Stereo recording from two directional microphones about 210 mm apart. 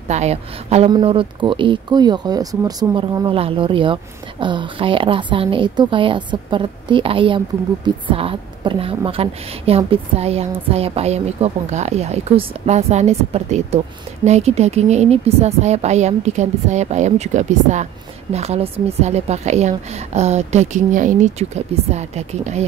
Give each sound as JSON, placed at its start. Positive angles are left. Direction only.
{"t": 0.1, "sound": "a woman's voice", "side_deg": -30}